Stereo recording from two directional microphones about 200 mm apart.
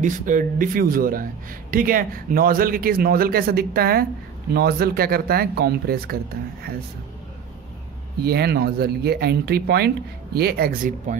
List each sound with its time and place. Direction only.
0.0 s speech: 40° right (ahead or behind)
8.2 s speech: 50° right (ahead or behind)